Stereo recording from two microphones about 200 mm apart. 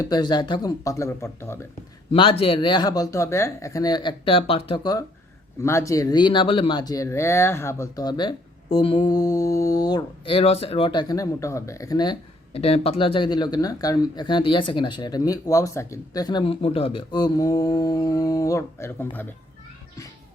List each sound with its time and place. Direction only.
0.0 s speech: 20° left (ahead or behind)
2.1 s speech: 25° left (ahead or behind)
12.5 s speech: 30° left (ahead or behind); by 19.3 s 10° left (ahead or behind)